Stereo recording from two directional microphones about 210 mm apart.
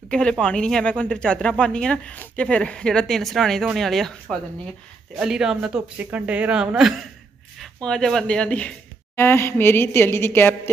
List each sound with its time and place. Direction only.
0.1 s speech: 5° left (ahead or behind)